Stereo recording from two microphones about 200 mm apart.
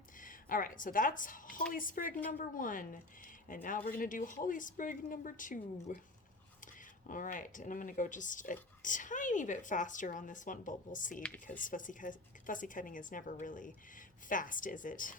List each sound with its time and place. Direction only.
0.2 s a woman's voice: 45° left (ahead or behind)
7.1 s a woman's voice: 40° left (ahead or behind)